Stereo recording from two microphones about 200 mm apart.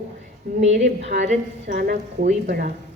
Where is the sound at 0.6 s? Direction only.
35° right (ahead or behind).